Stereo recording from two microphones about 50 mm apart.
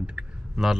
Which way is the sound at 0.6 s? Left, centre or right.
Centre.